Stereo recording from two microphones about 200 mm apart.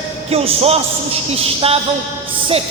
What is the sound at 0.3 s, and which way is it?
A man's voice, 30° right (ahead or behind).